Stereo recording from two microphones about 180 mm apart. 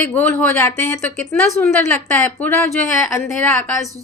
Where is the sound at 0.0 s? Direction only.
10° left (ahead or behind).